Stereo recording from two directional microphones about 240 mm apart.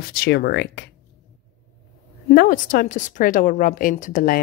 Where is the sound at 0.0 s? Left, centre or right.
Left.